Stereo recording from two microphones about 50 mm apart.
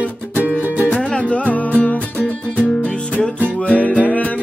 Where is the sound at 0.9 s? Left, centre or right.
Left.